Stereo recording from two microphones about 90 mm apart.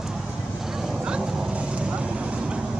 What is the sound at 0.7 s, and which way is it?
Vehicle, 5° right (ahead or behind).